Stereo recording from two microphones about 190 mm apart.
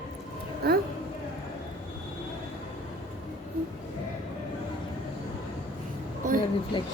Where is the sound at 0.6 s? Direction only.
55° right (ahead or behind).